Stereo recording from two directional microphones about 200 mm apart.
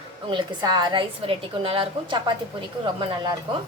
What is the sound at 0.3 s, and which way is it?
A woman's voice, 20° right (ahead or behind).